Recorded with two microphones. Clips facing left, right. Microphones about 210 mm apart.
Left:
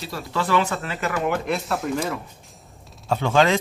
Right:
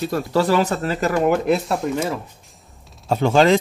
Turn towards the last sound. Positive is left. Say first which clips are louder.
# right 4 dB
turn(degrees=-35)  # may be behind; listen again after turning